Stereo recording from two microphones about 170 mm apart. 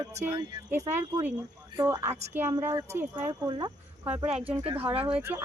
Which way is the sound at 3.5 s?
25° right (ahead or behind).